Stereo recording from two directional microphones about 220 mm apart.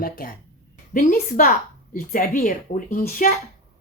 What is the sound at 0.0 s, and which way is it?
A woman's voice, 40° left (ahead or behind).